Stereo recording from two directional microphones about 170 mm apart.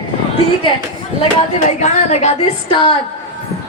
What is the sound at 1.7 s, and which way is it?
Speech, 45° left (ahead or behind).